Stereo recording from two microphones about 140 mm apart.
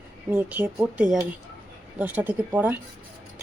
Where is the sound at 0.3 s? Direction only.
15° right (ahead or behind).